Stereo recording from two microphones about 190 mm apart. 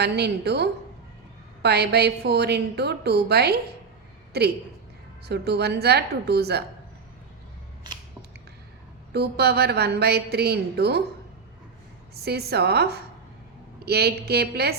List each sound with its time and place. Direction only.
0.0 s a woman's voice: 60° right (ahead or behind)
9.1 s a woman's voice: 60° right (ahead or behind)
12.1 s a woman's voice: 55° right (ahead or behind)